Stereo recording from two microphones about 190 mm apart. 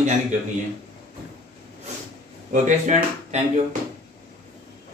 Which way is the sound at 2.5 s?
40° right (ahead or behind).